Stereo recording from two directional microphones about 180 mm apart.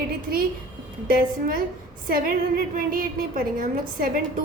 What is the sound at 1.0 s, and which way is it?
A woman's voice, 50° right (ahead or behind).